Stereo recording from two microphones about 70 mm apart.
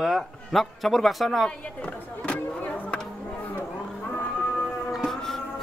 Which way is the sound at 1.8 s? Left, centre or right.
Centre.